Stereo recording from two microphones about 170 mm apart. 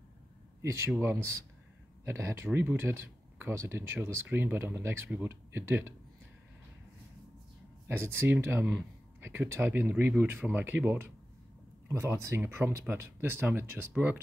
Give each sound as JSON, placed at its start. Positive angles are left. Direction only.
{"t": 0.6, "sound": "speech", "side_deg": -15}
{"t": 2.0, "sound": "speech", "side_deg": -15}
{"t": 7.9, "sound": "speech", "side_deg": -15}